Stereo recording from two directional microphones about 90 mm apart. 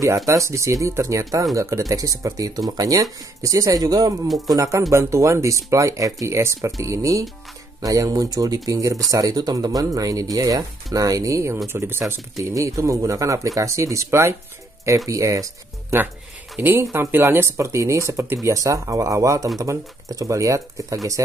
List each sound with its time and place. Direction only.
0.3 s speech: 35° right (ahead or behind)
12.4 s speech: 35° right (ahead or behind)
16.5 s speech: 20° right (ahead or behind); by 21.0 s 40° right (ahead or behind)